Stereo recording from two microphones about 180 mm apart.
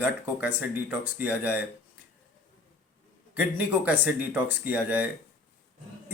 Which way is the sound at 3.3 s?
5° right (ahead or behind).